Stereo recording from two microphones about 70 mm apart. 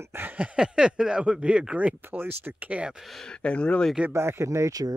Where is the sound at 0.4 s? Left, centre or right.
Centre.